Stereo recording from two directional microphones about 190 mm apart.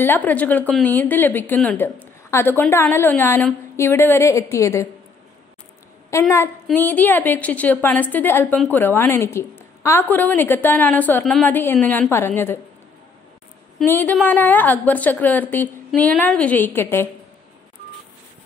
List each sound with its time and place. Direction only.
0.0 s a woman's voice: 10° left (ahead or behind)
6.1 s a woman's voice: 15° left (ahead or behind)
13.8 s a woman's voice: 10° left (ahead or behind)